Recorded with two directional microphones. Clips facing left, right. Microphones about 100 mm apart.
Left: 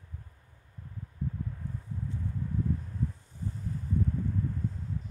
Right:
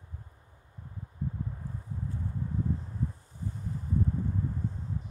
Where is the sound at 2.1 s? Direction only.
20° right (ahead or behind).